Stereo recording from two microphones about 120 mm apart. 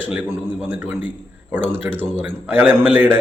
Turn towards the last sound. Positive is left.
turn(degrees=-15)  # may be behind; listen again after turning